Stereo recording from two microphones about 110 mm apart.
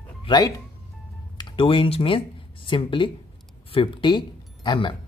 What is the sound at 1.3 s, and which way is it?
Speech, 50° left (ahead or behind).